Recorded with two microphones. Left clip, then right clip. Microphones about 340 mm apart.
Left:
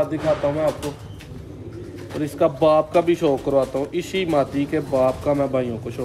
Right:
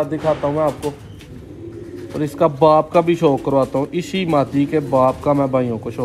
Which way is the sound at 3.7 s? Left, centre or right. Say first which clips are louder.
Right 4 dB; right.